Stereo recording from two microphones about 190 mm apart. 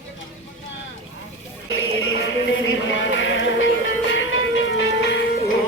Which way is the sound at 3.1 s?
80° left.